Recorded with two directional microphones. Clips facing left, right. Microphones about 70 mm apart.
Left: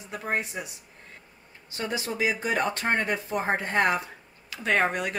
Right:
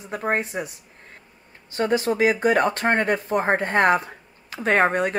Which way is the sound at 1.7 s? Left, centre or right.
Right.